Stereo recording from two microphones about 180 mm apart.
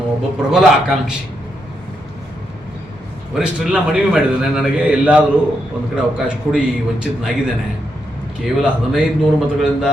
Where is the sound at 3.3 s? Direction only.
5° right (ahead or behind).